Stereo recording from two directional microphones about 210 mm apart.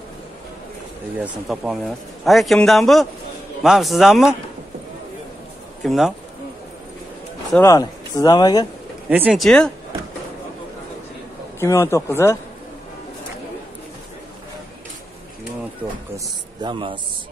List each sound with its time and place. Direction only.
1.1 s a man's voice: 5° right (ahead or behind)
5.8 s speech: centre (ahead or behind)
7.5 s speech: 15° left (ahead or behind)
9.1 s a man's voice: 5° right (ahead or behind)
11.6 s speech: 10° left (ahead or behind)
16.6 s a man's voice: 25° right (ahead or behind)